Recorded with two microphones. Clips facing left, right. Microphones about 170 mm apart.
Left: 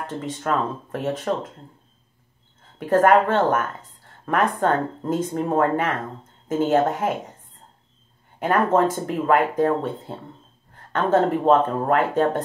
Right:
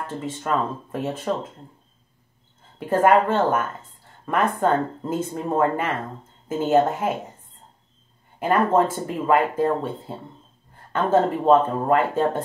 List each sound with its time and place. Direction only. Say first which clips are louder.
0.2 s speech: left 1 dB; 5° right (ahead or behind)
2.8 s speech: left 1 dB; 5° right (ahead or behind)
8.7 s speech: left 1 dB; 65° left (ahead or behind)
9.2 s speech: left 1 dB; 5° right (ahead or behind)